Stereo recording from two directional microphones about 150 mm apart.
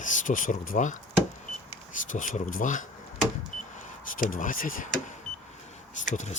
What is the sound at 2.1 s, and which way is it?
Speech, 60° left (ahead or behind).